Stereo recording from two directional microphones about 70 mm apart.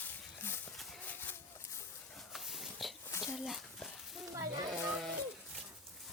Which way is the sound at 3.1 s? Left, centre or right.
Left.